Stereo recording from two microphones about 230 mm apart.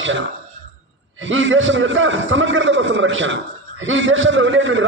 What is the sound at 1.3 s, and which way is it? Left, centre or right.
A man's voice, right.